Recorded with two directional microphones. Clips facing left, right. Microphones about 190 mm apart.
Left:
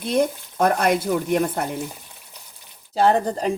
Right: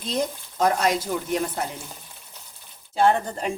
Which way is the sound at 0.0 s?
55° left (ahead or behind).